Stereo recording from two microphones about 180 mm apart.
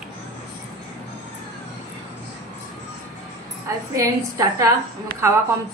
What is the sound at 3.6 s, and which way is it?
A woman's voice, 15° right (ahead or behind).